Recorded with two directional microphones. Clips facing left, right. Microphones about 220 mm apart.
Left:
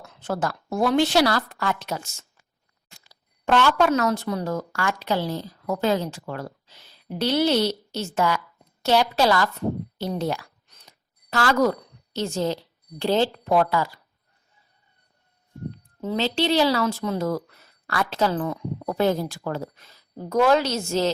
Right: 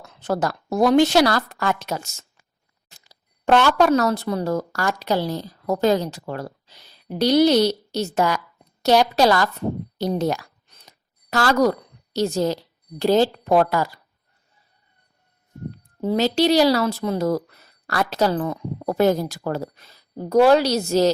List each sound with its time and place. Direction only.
0.2 s a woman's voice: 40° right (ahead or behind)
3.4 s a woman's voice: 40° right (ahead or behind)
10.7 s a sound: 40° right (ahead or behind)
13.0 s a woman's voice: 40° right (ahead or behind)
16.0 s a woman's voice: 40° right (ahead or behind)